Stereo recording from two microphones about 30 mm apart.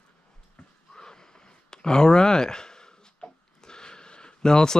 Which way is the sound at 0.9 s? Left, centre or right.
Left.